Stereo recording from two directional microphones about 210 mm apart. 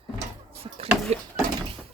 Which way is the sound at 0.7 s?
30° right (ahead or behind).